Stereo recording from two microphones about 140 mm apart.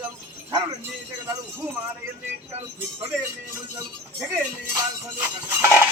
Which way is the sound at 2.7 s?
15° right (ahead or behind).